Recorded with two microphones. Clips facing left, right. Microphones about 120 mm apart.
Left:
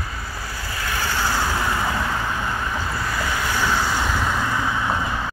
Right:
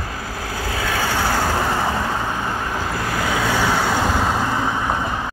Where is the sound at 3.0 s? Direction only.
75° right (ahead or behind); by 4.1 s 60° right (ahead or behind).